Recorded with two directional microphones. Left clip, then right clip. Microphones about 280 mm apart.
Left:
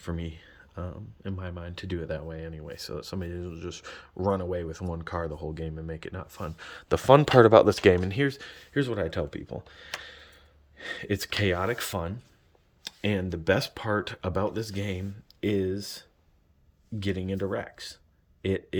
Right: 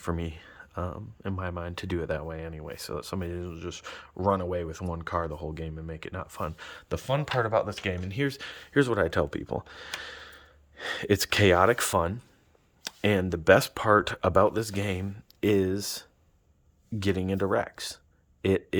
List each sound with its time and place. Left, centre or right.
0.0 s speech: centre
6.9 s speech: centre
7.2 s speech: left
8.0 s speech: centre